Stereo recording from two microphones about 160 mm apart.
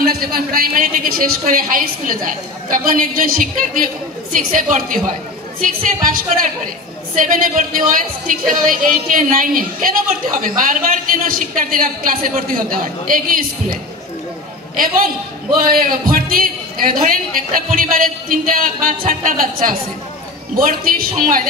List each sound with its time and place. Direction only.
0.0 s a woman's voice: 75° right (ahead or behind)
15.5 s a woman's voice: 65° right (ahead or behind)